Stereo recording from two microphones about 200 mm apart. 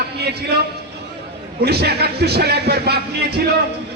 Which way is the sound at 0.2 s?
55° right (ahead or behind).